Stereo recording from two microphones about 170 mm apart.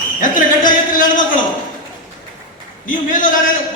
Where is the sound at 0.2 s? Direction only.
50° left (ahead or behind).